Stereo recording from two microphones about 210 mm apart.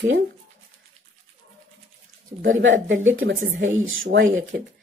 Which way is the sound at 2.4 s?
65° right (ahead or behind).